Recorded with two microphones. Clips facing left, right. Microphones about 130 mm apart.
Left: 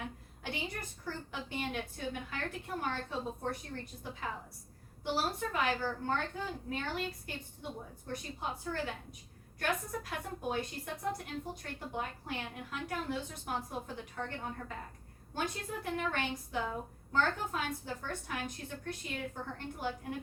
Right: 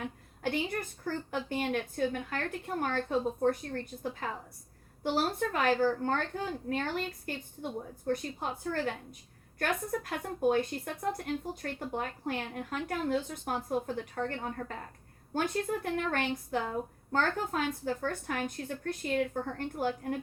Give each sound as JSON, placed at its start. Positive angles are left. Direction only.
{"t": 0.4, "sound": "a woman's voice", "side_deg": -55}
{"t": 8.0, "sound": "a woman's voice", "side_deg": -50}